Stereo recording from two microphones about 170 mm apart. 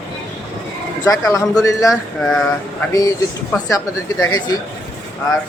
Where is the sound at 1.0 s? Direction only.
20° left (ahead or behind).